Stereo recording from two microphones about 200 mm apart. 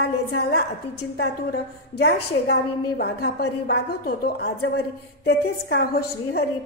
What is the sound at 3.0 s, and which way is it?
A woman's voice, 55° left (ahead or behind).